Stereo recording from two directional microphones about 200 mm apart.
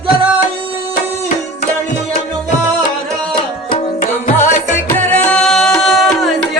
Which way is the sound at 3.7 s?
40° left (ahead or behind).